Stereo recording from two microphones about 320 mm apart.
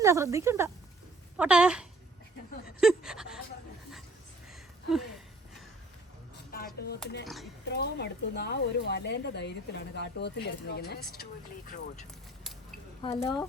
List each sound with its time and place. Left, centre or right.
0.0 s speech: centre
2.8 s a sound: centre
6.7 s a sound: left
7.3 s speech: centre
7.6 s speech: left
13.0 s speech: centre